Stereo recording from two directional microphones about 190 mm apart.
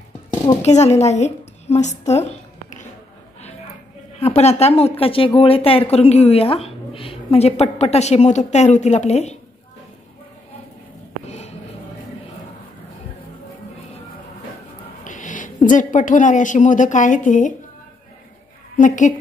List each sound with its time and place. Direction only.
0.6 s a woman's voice: 35° left (ahead or behind)
4.2 s speech: 35° left (ahead or behind)
11.2 s a sound: 35° left (ahead or behind)
15.0 s speech: 40° left (ahead or behind)
18.8 s speech: 40° left (ahead or behind)